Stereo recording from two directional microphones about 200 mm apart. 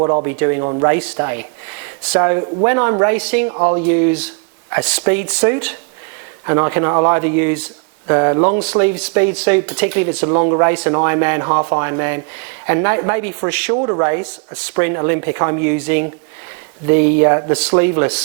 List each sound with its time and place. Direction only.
0.0 s speech: 30° right (ahead or behind)
0.3 s speech: 15° right (ahead or behind)
0.6 s speech: 30° right (ahead or behind)
0.9 s speech: 10° right (ahead or behind)
3.5 s speech: 30° right (ahead or behind)
3.8 s speech: 15° right (ahead or behind)
13.7 s speech: 25° right (ahead or behind)